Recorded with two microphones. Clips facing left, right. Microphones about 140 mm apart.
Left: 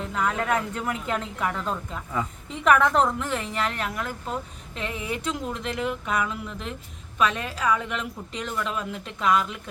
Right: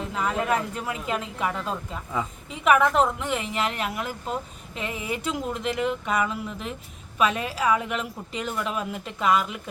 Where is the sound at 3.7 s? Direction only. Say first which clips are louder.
Right 1 dB; 15° right (ahead or behind).